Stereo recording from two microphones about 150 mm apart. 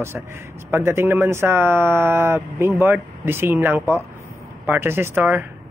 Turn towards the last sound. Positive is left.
turn(degrees=-15)  # may be behind; listen again after turning